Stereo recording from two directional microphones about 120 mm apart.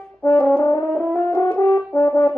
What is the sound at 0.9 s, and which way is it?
French horn, 10° left (ahead or behind).